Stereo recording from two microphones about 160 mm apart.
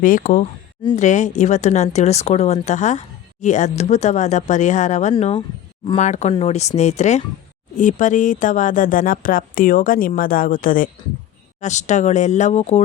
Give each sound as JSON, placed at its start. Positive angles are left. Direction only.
{"t": 0.0, "sound": "speech", "side_deg": 55}
{"t": 5.1, "sound": "speech", "side_deg": 35}
{"t": 6.0, "sound": "speech", "side_deg": 45}
{"t": 11.6, "sound": "speech", "side_deg": 45}